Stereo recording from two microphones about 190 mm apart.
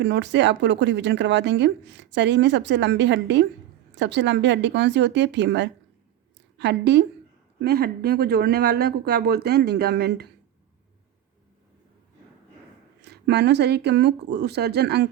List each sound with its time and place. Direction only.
0.0 s speech: 65° right (ahead or behind)
13.0 s speech: 60° right (ahead or behind)